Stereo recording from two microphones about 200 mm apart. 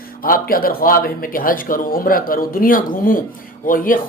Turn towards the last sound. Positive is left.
turn(degrees=45)  # may be behind; listen again after turning